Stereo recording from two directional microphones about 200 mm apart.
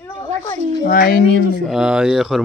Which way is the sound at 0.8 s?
50° left (ahead or behind).